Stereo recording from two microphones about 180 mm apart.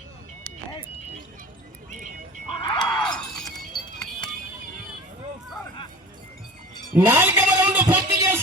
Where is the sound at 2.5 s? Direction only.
25° left (ahead or behind).